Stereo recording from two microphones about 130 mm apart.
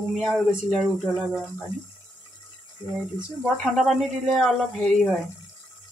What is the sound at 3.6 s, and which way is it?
Speech, centre (ahead or behind).